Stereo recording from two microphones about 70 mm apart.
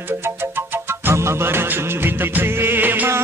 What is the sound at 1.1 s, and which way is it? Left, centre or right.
Music of bollywood, right.